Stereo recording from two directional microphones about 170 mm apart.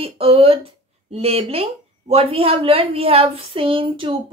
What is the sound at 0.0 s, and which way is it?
A woman's voice, 35° right (ahead or behind).